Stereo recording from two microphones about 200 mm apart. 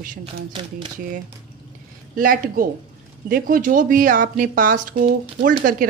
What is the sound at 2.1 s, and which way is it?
Speech, 45° right (ahead or behind).